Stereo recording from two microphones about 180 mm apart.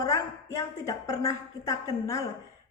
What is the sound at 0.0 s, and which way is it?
A woman's voice, 20° left (ahead or behind).